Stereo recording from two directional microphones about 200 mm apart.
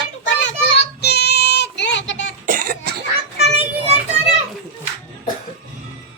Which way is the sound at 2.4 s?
45° right (ahead or behind).